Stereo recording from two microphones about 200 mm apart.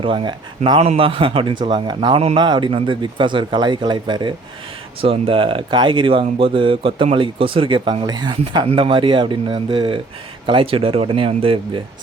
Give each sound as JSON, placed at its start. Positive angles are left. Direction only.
{"t": 0.0, "sound": "speech", "side_deg": -25}